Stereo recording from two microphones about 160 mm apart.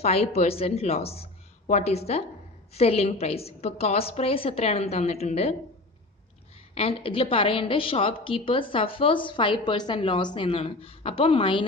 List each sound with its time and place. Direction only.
0.0 s a woman's voice: 40° left (ahead or behind)
6.7 s a woman's voice: 40° left (ahead or behind)